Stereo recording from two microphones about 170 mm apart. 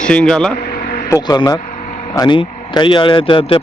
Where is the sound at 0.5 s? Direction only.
60° left (ahead or behind).